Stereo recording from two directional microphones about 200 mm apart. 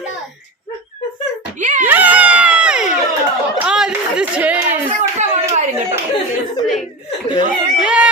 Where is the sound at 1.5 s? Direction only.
40° right (ahead or behind).